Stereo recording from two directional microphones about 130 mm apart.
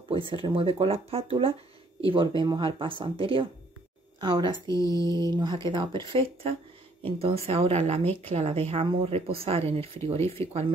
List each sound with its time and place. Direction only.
0.1 s speech: 40° right (ahead or behind)
4.6 s speech: 25° left (ahead or behind)
5.0 s speech: 35° right (ahead or behind); by 10.4 s 50° right (ahead or behind)